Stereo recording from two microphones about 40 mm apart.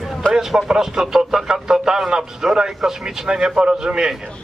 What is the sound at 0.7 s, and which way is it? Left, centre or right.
Speech, centre.